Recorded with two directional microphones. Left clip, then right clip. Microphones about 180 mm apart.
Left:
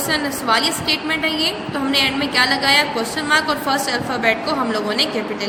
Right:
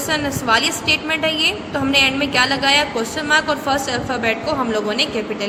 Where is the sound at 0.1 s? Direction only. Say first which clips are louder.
Right 1 dB; 15° right (ahead or behind).